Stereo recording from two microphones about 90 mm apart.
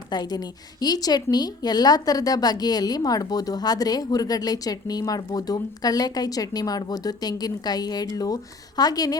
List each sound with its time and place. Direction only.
0.1 s a woman's voice: 50° left (ahead or behind)